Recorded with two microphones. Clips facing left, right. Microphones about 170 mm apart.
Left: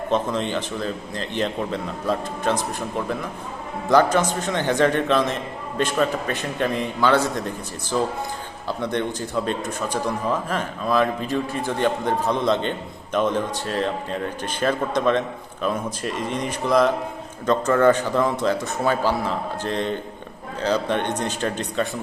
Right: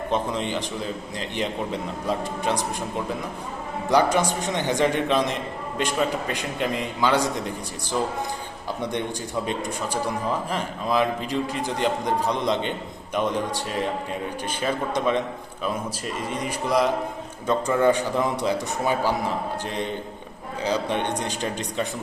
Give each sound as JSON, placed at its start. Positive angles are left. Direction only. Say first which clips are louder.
{"t": 0.1, "sound": "a man's voice", "louder": "left 3 dB", "side_deg": -15}
{"t": 3.8, "sound": "a man's voice", "louder": "left 3 dB", "side_deg": -15}